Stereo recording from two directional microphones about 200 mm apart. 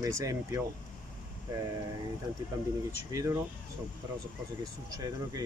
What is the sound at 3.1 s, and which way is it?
Speech, 15° right (ahead or behind).